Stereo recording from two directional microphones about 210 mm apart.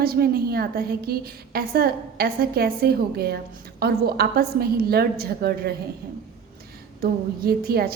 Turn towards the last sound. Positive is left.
turn(degrees=-45)  # may be behind; listen again after turning